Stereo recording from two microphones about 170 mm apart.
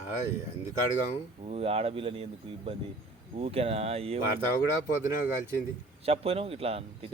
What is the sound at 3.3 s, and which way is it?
Speech, 35° right (ahead or behind).